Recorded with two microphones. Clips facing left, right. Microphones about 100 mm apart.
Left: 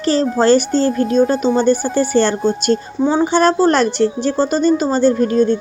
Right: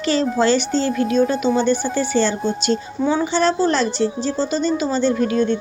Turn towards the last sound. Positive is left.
turn(degrees=35)  # may be behind; listen again after turning